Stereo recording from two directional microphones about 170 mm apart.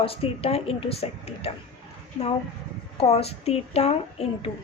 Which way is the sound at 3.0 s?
35° left (ahead or behind).